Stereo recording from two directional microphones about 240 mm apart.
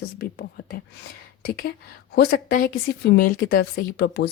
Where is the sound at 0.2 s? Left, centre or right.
Left.